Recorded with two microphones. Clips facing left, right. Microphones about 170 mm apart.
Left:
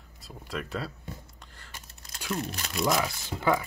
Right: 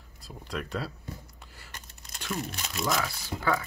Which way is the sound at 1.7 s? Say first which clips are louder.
Even; 5° left (ahead or behind).